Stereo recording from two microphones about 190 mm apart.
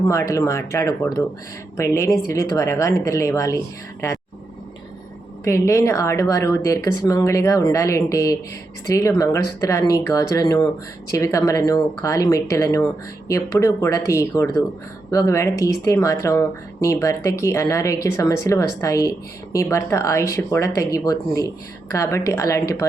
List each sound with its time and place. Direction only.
0.1 s speech: 15° left (ahead or behind)
5.5 s speech: 15° left (ahead or behind)